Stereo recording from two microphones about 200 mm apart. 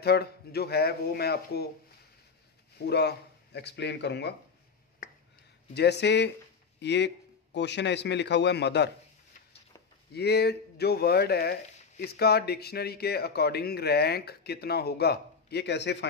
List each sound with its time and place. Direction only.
0.0 s speech: 55° left (ahead or behind)
2.8 s speech: 55° left (ahead or behind)
5.8 s speech: 55° left (ahead or behind)
10.1 s speech: 55° left (ahead or behind)